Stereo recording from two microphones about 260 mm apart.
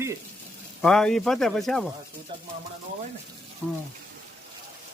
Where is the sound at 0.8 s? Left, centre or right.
Centre.